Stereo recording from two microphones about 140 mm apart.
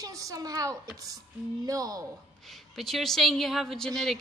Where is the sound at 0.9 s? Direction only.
25° right (ahead or behind).